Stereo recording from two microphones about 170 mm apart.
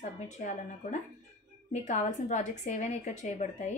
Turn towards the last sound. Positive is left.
turn(degrees=45)  # may be behind; listen again after turning